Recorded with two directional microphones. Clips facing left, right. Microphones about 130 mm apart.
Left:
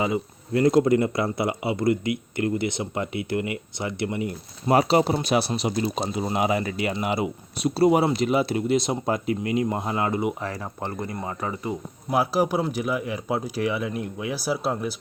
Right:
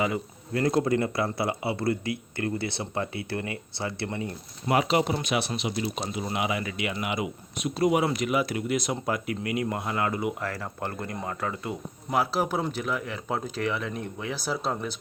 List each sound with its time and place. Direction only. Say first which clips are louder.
0.0 s speech: left 3 dB; 25° left (ahead or behind)
4.7 s speech: left 4 dB; 35° left (ahead or behind); by 14.9 s 10° left (ahead or behind)